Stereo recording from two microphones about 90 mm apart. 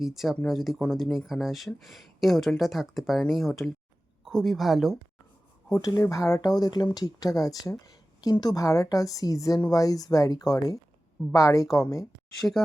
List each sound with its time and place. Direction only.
0.0 s speech: 5° right (ahead or behind)
5.8 s a woman's voice: 40° left (ahead or behind)
6.4 s a woman's voice: 45° left (ahead or behind)
12.4 s speech: 5° left (ahead or behind)